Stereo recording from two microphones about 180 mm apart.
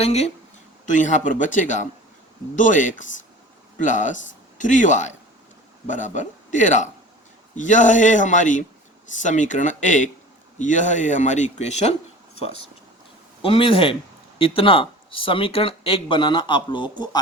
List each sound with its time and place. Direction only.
0.0 s speech: 35° left (ahead or behind)
13.4 s speech: 30° left (ahead or behind)